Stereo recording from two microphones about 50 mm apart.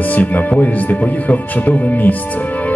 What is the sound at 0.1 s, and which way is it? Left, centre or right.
Speech, left.